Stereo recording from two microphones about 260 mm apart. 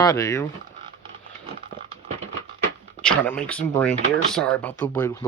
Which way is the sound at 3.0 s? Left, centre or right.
Centre.